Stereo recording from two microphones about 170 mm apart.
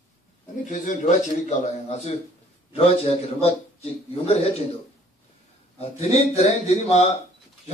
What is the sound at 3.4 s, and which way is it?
Speech, 35° left (ahead or behind).